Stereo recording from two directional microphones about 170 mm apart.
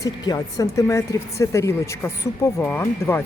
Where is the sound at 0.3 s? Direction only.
20° left (ahead or behind).